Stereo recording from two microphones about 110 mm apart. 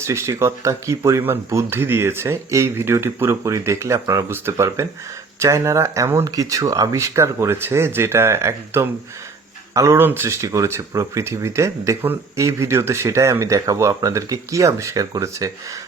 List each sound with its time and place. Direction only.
0.0 s speech: 25° right (ahead or behind)